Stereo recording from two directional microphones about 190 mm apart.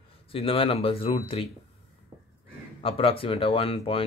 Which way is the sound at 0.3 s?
30° left (ahead or behind).